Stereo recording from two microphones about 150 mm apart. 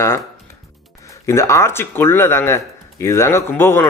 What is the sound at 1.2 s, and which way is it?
Speech, 20° left (ahead or behind).